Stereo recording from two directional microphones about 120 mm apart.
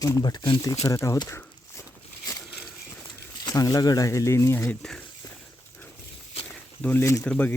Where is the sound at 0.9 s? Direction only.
25° left (ahead or behind).